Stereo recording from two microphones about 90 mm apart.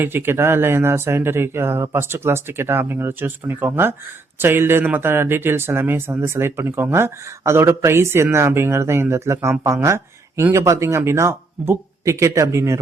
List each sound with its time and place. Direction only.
0.0 s speech: 25° right (ahead or behind)